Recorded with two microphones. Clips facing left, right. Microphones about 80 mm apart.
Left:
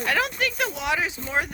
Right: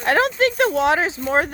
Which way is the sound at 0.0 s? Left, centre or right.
Right.